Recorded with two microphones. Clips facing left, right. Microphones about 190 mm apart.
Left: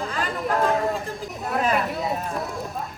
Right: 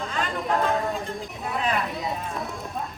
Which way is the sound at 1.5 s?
50° left (ahead or behind).